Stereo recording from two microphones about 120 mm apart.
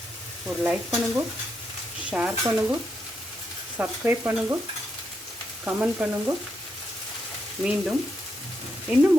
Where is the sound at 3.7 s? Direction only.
15° right (ahead or behind).